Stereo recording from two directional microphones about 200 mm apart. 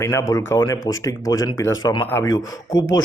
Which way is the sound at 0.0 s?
15° left (ahead or behind).